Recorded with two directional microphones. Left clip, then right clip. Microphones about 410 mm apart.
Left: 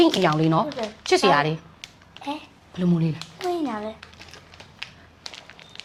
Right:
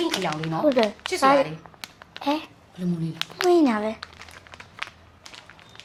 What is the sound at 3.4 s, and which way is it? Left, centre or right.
Speech, right.